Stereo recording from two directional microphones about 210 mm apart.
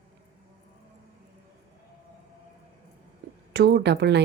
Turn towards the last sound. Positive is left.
turn(degrees=-55)  # may be behind; listen again after turning